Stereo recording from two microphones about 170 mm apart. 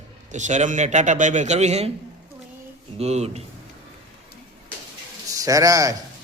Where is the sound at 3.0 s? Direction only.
40° right (ahead or behind).